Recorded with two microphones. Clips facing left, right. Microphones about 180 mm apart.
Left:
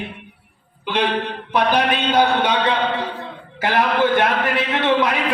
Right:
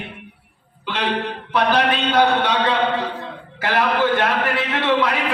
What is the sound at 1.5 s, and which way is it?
A man's voice, 15° left (ahead or behind).